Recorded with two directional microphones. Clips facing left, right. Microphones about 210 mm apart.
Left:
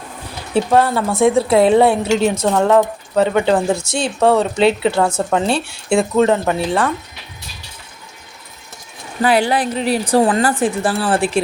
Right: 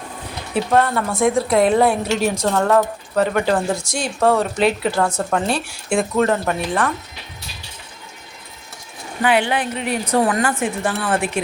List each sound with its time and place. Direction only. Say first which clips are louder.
0.5 s speech: left 3 dB; 30° left (ahead or behind)
2.3 s a woman's voice: left 3 dB; 5° left (ahead or behind)
2.6 s speech: left 3 dB; 20° left (ahead or behind)
9.2 s a woman's voice: left 3 dB; 35° left (ahead or behind)